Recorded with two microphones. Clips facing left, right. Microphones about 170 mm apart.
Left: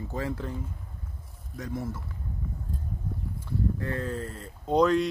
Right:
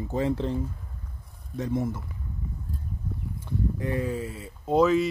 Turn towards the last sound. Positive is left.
turn(degrees=-5)  # may be behind; listen again after turning